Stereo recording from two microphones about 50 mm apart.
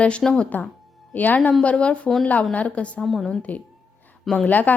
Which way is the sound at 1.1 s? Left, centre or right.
Left.